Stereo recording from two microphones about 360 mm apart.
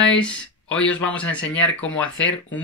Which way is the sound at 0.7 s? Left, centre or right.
Centre.